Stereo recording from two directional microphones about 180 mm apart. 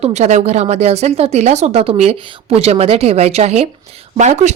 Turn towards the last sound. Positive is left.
turn(degrees=-40)  # may be behind; listen again after turning